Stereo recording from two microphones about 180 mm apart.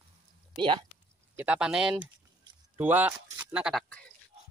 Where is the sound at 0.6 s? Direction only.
25° right (ahead or behind).